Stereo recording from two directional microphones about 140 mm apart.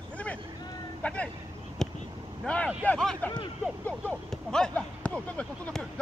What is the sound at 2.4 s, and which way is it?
Speech, 10° left (ahead or behind).